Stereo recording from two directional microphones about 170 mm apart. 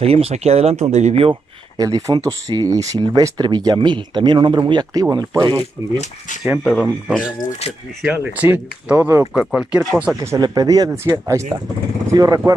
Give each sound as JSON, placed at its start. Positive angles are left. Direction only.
{"t": 0.0, "sound": "speech", "side_deg": -35}
{"t": 1.8, "sound": "speech", "side_deg": -20}
{"t": 6.6, "sound": "speech", "side_deg": 0}
{"t": 9.3, "sound": "speech", "side_deg": 0}
{"t": 10.3, "sound": "speech", "side_deg": -20}